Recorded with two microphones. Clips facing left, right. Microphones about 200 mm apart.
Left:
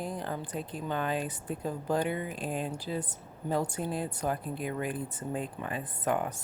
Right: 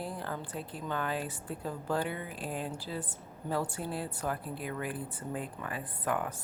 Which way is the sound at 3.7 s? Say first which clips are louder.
Left 3 dB; 20° left (ahead or behind).